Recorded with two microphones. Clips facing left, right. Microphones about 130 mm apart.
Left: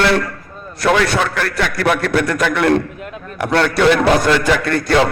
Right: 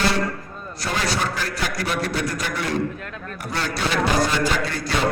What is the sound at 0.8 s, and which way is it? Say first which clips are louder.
A man's voice: left 10 dB; 65° left (ahead or behind).